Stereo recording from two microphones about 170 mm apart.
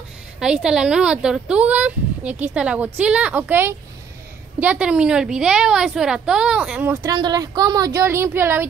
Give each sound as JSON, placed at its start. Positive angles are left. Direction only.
{"t": 0.4, "sound": "a woman's voice", "side_deg": -5}
{"t": 7.0, "sound": "speech", "side_deg": -20}